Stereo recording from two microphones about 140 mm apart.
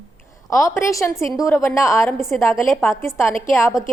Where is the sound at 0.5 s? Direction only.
20° left (ahead or behind).